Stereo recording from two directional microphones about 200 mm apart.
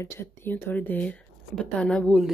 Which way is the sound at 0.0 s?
10° left (ahead or behind).